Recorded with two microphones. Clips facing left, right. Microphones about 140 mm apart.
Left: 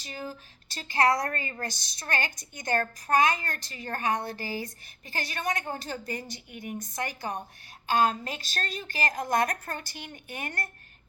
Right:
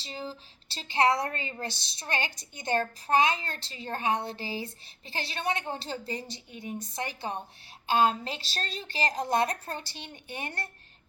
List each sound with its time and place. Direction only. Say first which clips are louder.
0.0 s a woman's voice: even; 25° right (ahead or behind)